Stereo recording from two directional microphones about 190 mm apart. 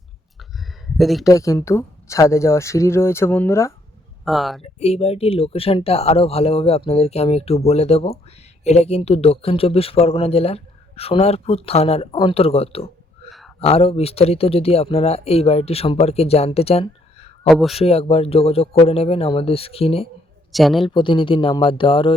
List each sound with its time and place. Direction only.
0.9 s speech: centre (ahead or behind)
1.2 s speech: 15° left (ahead or behind)
4.3 s speech: centre (ahead or behind)
4.6 s speech: 35° left (ahead or behind)
17.5 s speech: centre (ahead or behind)
17.7 s speech: 30° left (ahead or behind)
20.5 s speech: centre (ahead or behind)
20.8 s speech: 25° left (ahead or behind)